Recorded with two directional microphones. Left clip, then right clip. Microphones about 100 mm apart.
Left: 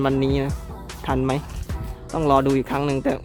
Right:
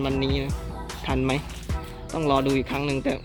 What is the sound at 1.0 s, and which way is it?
Speech, 30° left (ahead or behind).